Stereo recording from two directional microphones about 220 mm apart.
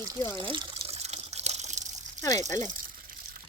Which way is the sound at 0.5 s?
30° right (ahead or behind).